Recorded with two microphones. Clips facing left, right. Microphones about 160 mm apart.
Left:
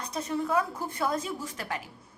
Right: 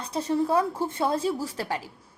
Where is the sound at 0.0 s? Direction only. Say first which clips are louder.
Right 5 dB; 30° right (ahead or behind).